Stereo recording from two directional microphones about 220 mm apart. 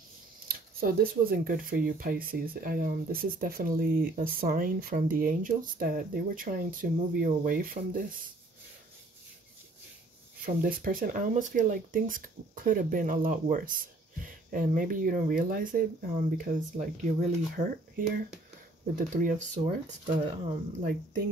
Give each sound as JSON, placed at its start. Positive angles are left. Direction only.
{"t": 0.5, "sound": "speech", "side_deg": -40}
{"t": 10.4, "sound": "speech", "side_deg": -40}